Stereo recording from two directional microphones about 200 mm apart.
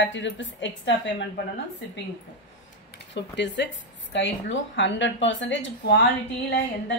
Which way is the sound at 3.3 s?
65° left (ahead or behind).